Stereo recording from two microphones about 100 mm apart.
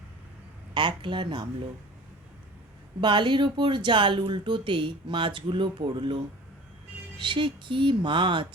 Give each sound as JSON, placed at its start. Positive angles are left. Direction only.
{"t": 0.7, "sound": "speech", "side_deg": -55}
{"t": 3.0, "sound": "speech", "side_deg": -55}
{"t": 7.2, "sound": "speech", "side_deg": -55}